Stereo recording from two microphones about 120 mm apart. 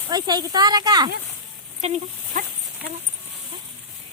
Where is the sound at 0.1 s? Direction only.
35° right (ahead or behind).